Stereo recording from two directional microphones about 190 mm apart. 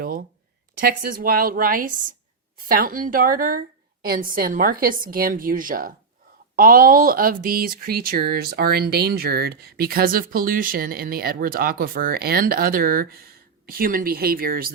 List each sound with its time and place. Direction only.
0.8 s speech: 50° right (ahead or behind)